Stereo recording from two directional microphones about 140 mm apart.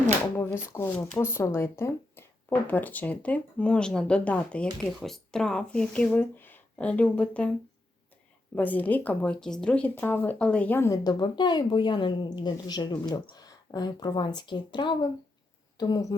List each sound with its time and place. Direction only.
0.3 s speech: 15° left (ahead or behind)
8.5 s speech: 10° left (ahead or behind)